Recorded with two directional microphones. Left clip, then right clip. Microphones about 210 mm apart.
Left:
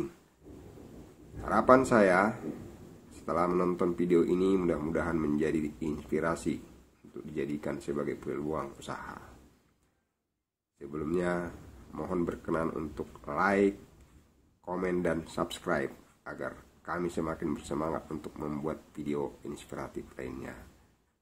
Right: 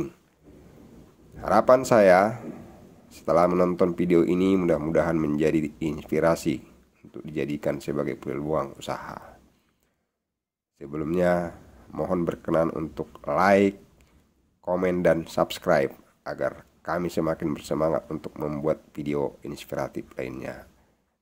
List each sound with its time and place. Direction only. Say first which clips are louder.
1.4 s speech: right 5 dB; 45° right (ahead or behind)
10.8 s speech: right 8 dB; 45° right (ahead or behind)